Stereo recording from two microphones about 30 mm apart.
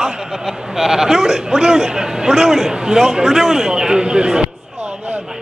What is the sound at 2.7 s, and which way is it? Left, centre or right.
A man's voice, right.